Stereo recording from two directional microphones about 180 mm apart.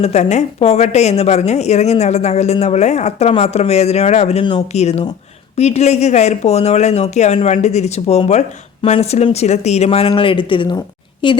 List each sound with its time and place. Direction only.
0.0 s speech: 40° left (ahead or behind)